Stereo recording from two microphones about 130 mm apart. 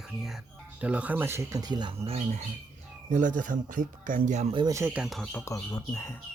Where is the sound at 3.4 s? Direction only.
90° right; by 4.5 s 70° right (ahead or behind).